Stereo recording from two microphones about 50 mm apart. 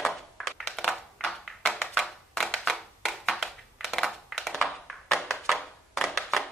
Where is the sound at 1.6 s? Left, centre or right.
Centre.